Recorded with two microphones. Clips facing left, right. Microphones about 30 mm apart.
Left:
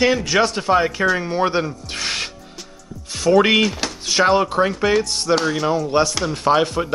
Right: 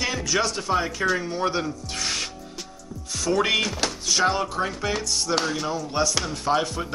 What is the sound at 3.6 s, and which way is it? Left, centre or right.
Speech, centre.